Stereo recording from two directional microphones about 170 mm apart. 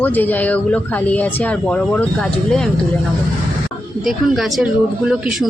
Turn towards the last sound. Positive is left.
turn(degrees=-5)  # may be behind; listen again after turning